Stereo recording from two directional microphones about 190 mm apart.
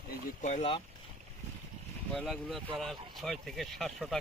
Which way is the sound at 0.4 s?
35° left (ahead or behind).